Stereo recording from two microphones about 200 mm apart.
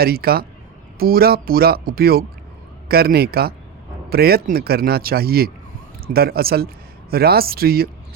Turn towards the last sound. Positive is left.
turn(degrees=-50)  # may be behind; listen again after turning